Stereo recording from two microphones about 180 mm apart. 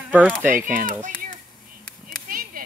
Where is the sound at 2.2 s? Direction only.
50° right (ahead or behind).